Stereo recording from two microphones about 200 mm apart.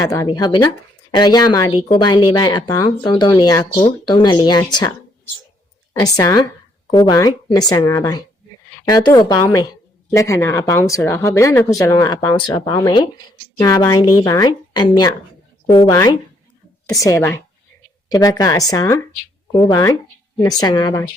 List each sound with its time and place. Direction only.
0.0 s speech: 15° left (ahead or behind)
5.9 s speech: 15° left (ahead or behind)